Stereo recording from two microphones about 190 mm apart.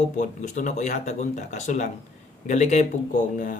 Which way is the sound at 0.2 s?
40° left (ahead or behind).